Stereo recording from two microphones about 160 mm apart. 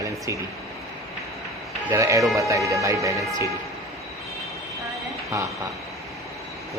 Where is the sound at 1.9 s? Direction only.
20° right (ahead or behind).